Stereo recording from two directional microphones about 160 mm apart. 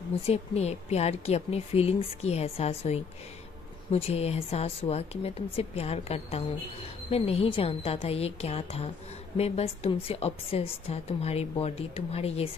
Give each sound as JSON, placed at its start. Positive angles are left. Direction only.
{"t": 0.2, "sound": "a woman's voice", "side_deg": 40}